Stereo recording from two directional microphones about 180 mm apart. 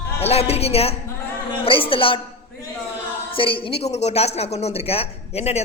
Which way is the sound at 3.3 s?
30° left (ahead or behind).